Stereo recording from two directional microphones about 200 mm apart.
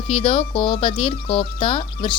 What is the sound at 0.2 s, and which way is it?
A woman's voice, 30° left (ahead or behind).